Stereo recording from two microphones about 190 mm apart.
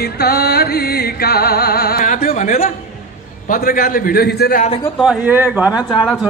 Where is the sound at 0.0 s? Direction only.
55° left (ahead or behind).